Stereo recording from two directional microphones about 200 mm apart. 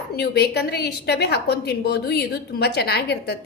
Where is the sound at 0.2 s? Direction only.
55° left (ahead or behind).